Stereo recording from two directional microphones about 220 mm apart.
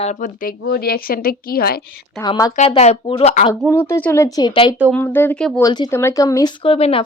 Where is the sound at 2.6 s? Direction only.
30° left (ahead or behind).